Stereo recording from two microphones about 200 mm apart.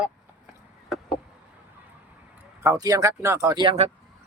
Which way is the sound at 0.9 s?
Centre (ahead or behind).